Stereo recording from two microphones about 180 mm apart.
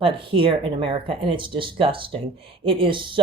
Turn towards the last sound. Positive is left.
turn(degrees=-25)  # may be behind; listen again after turning